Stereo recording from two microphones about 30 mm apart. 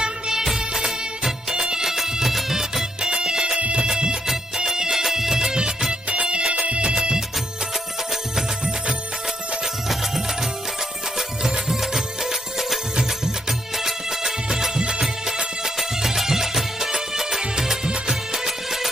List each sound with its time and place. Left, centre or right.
0.0 s music of bollywood: right
1.5 s music: right
1.8 s music: centre
3.0 s music: right
5.9 s music: right
6.5 s music: right
6.9 s music: right
9.9 s music: centre
14.8 s music: right; by 18.9 s centre